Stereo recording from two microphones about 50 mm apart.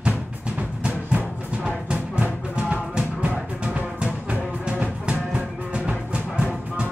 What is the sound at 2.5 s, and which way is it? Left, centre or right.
Music, right.